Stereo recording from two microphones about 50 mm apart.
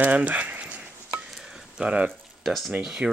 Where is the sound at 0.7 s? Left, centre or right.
Right.